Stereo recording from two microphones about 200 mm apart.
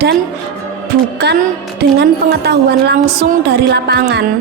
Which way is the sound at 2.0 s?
55° right (ahead or behind).